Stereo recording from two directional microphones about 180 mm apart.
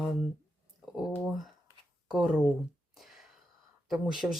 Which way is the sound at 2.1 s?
5° right (ahead or behind).